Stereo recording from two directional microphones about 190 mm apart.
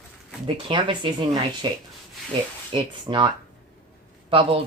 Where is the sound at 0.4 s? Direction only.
25° right (ahead or behind).